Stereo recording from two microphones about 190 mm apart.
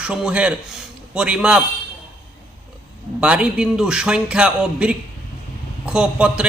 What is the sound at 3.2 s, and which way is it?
A man's voice, 5° right (ahead or behind).